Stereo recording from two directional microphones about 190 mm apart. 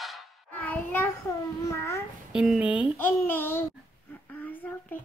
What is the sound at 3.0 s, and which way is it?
Speech, 10° left (ahead or behind).